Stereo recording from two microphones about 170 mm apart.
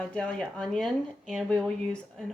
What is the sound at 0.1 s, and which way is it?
Speech, 5° left (ahead or behind).